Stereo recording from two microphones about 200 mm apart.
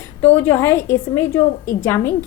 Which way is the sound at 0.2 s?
10° left (ahead or behind).